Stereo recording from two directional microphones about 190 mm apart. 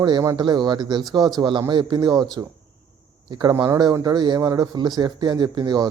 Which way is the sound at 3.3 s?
20° right (ahead or behind).